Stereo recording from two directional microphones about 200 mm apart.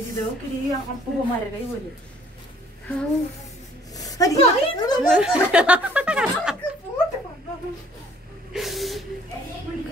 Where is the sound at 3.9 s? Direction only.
20° left (ahead or behind).